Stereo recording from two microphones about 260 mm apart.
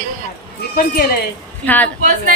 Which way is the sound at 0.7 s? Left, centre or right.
Left.